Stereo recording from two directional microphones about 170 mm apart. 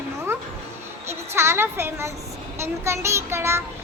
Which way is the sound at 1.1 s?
15° right (ahead or behind).